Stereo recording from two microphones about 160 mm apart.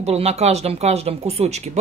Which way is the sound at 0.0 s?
40° right (ahead or behind).